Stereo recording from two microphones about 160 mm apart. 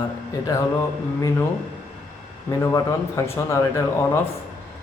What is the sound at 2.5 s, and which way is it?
Speech, 20° left (ahead or behind).